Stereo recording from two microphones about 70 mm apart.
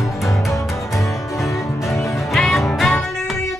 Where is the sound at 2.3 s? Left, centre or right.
Centre.